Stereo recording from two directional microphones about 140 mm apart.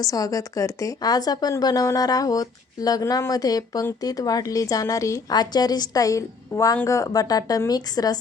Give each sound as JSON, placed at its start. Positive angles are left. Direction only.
{"t": 0.0, "sound": "speech", "side_deg": 25}